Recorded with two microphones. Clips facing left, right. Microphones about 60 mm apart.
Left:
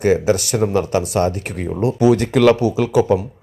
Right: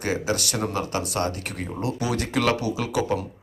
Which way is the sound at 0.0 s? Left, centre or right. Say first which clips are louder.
Left 10 dB; left.